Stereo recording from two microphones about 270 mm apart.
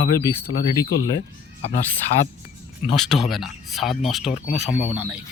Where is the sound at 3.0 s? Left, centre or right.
Centre.